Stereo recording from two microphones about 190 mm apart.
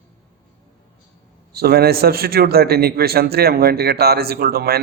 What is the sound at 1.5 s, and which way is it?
A man's voice, 55° right (ahead or behind).